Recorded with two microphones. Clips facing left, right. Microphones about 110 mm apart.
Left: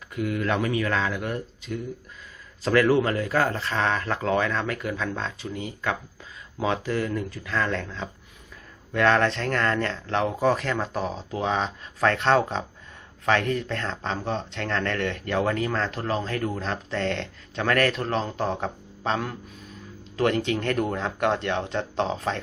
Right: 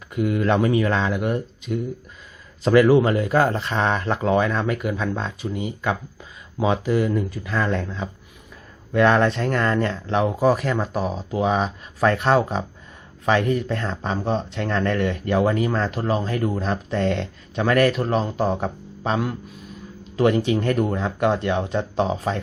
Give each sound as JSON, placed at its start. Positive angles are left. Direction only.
{"t": 0.1, "sound": "speech", "side_deg": -20}